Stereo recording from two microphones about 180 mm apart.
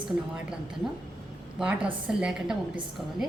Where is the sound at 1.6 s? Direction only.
5° right (ahead or behind).